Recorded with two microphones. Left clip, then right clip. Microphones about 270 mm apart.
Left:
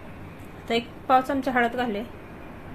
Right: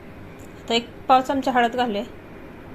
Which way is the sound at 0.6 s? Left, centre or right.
Centre.